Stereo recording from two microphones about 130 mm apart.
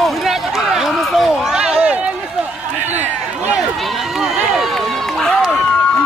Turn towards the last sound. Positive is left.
turn(degrees=5)  # may be behind; listen again after turning